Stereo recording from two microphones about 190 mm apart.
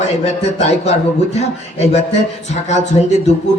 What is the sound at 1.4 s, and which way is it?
Speech, 35° left (ahead or behind).